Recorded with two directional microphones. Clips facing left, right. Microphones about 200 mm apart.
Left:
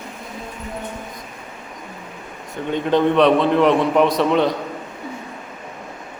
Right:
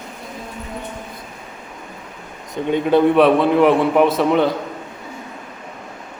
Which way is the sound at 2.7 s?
10° right (ahead or behind).